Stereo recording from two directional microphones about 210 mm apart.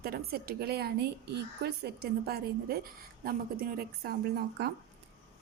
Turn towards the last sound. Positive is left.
turn(degrees=-50)  # may be behind; listen again after turning